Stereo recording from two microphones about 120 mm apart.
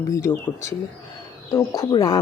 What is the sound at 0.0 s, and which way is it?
Speech, 30° left (ahead or behind).